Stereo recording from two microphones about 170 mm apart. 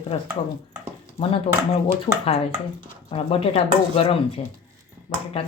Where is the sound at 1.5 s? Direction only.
30° left (ahead or behind).